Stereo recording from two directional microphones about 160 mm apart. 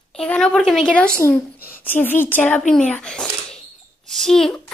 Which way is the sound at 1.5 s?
65° left (ahead or behind).